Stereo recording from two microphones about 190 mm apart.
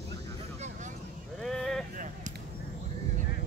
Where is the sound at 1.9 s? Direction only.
45° right (ahead or behind).